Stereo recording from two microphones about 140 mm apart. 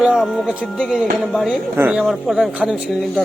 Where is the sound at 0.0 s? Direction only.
5° right (ahead or behind).